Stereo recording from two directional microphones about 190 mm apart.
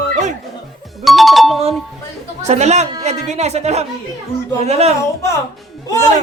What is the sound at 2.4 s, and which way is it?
A man's voice, 35° right (ahead or behind).